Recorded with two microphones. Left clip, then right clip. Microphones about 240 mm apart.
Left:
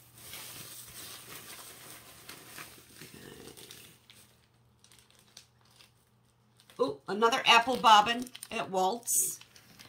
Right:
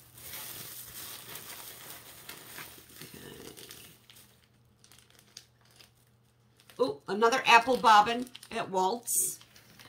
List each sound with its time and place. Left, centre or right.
6.8 s speech: centre
8.2 s computer keyboard: left
8.5 s speech: centre